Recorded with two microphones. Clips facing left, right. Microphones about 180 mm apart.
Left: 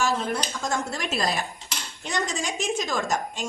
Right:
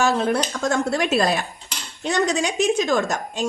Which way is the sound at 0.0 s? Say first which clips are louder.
Right 6 dB; 65° right (ahead or behind).